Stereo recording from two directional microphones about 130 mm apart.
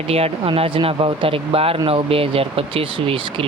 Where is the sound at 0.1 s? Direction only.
50° right (ahead or behind).